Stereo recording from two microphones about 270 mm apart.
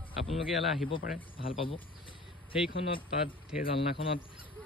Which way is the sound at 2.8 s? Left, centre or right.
Centre.